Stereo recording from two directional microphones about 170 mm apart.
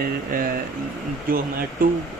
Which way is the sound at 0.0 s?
60° right (ahead or behind).